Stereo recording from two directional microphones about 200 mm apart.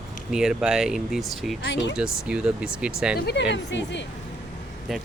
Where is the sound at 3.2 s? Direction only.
55° left (ahead or behind).